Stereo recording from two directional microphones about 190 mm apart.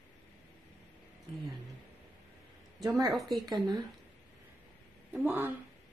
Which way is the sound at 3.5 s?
20° right (ahead or behind).